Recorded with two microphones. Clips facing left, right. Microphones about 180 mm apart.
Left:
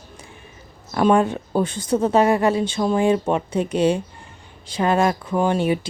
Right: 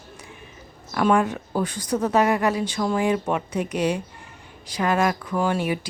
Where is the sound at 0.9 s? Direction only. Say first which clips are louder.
Left 3 dB; 25° left (ahead or behind).